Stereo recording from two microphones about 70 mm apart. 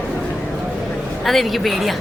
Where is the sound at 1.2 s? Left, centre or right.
Centre.